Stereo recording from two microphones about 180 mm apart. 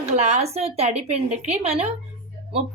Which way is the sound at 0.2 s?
35° right (ahead or behind).